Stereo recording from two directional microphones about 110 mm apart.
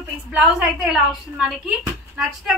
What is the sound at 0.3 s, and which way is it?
A woman's voice, 10° right (ahead or behind).